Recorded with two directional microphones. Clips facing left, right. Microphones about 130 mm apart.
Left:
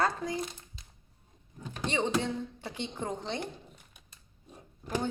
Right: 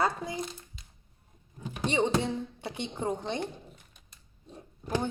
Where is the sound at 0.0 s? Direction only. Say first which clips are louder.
Even; 20° right (ahead or behind).